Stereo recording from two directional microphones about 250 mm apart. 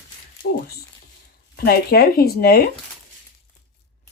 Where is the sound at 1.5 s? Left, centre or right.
Left.